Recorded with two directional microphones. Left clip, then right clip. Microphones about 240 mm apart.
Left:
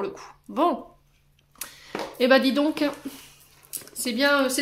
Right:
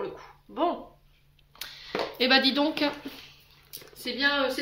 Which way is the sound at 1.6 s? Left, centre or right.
Left.